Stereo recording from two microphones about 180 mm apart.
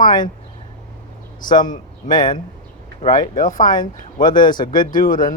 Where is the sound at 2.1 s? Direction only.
25° left (ahead or behind).